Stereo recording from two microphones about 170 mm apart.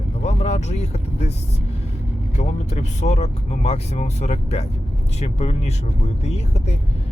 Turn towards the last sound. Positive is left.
turn(degrees=40)  # may be behind; listen again after turning